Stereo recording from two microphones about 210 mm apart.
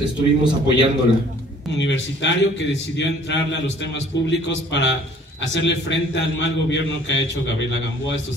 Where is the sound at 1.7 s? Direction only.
60° left (ahead or behind).